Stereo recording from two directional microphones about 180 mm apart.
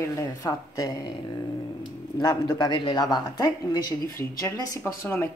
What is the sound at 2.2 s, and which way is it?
Speech, 20° left (ahead or behind).